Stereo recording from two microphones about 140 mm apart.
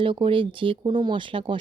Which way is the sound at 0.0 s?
40° right (ahead or behind).